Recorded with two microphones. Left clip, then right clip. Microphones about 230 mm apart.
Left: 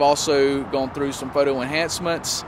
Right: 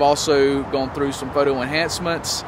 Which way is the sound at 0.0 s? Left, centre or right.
Left.